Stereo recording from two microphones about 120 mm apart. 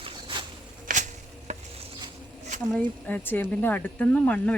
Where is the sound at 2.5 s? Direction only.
90° right.